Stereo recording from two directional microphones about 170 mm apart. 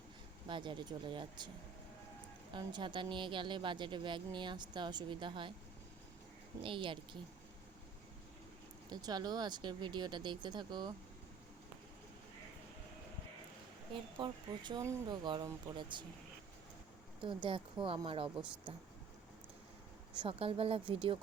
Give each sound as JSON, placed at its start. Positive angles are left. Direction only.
{"t": 0.4, "sound": "speech", "side_deg": -30}
{"t": 2.5, "sound": "speech", "side_deg": -25}
{"t": 6.6, "sound": "speech", "side_deg": -30}
{"t": 8.9, "sound": "speech", "side_deg": -25}
{"t": 13.9, "sound": "speech", "side_deg": -30}
{"t": 17.2, "sound": "speech", "side_deg": -30}
{"t": 20.1, "sound": "speech", "side_deg": -35}